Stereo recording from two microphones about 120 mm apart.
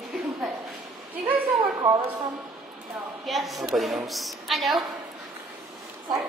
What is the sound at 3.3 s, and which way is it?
A woman's voice, centre (ahead or behind).